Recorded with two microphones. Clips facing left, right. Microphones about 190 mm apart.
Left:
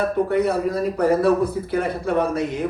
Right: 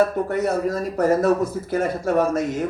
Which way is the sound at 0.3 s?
45° right (ahead or behind).